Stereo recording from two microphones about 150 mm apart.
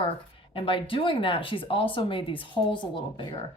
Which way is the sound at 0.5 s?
35° left (ahead or behind).